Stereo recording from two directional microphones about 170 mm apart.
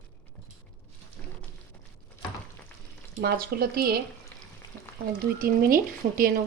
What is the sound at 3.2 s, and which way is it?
Speech, 65° right (ahead or behind).